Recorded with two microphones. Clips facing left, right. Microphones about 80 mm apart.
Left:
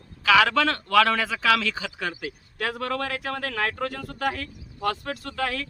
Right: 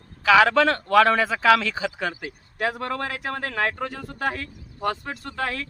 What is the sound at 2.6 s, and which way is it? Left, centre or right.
Speech, centre.